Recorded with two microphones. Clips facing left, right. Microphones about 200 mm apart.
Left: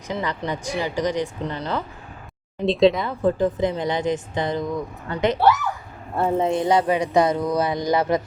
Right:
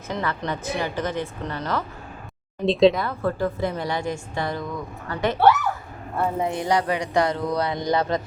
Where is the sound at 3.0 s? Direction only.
15° left (ahead or behind).